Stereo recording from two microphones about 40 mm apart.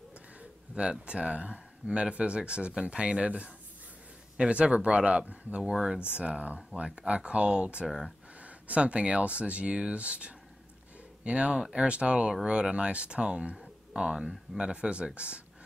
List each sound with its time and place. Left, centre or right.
0.4 s speech: right
5.6 s speech: centre
6.1 s speech: right
7.8 s speech: centre
8.4 s speech: right
13.6 s a sound: centre
14.6 s speech: right